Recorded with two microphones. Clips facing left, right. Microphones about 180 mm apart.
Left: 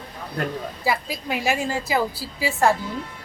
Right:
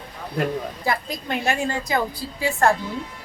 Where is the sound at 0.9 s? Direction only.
5° left (ahead or behind).